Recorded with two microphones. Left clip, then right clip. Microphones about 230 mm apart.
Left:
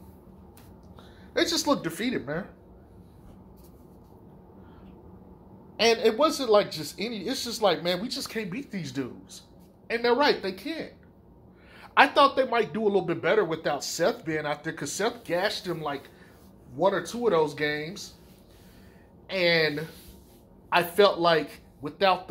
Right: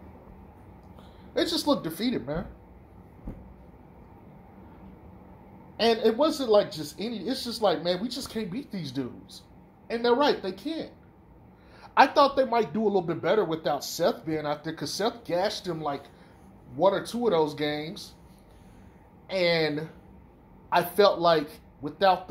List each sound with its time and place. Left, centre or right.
1.3 s speech: left
5.8 s speech: left
11.8 s a sound: left
12.2 s speech: centre
19.2 s speech: left
20.7 s speech: left